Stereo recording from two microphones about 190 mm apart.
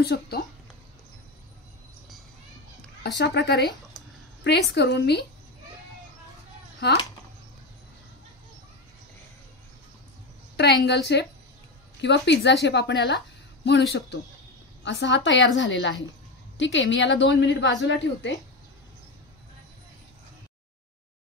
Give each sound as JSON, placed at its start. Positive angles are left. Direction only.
{"t": 0.0, "sound": "a woman's voice", "side_deg": 55}
{"t": 3.0, "sound": "a woman's voice", "side_deg": 65}
{"t": 6.8, "sound": "a woman's voice", "side_deg": 60}
{"t": 10.5, "sound": "a woman's voice", "side_deg": 60}